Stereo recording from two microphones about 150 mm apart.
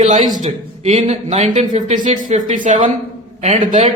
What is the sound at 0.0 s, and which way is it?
A man's voice, 55° right (ahead or behind).